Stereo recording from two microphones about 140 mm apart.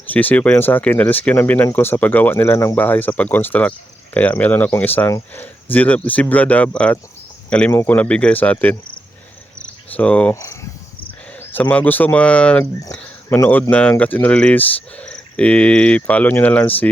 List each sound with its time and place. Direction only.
0.1 s speech: 10° left (ahead or behind)
9.9 s speech: 10° left (ahead or behind)
10.3 s speech: 25° left (ahead or behind)
11.5 s speech: 10° left (ahead or behind)
12.8 s speech: 20° left (ahead or behind)